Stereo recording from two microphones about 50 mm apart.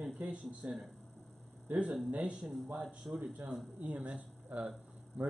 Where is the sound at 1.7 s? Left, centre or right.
Right.